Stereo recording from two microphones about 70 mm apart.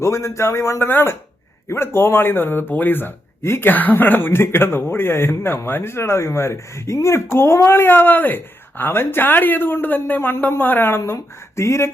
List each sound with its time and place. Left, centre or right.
0.0 s speech: left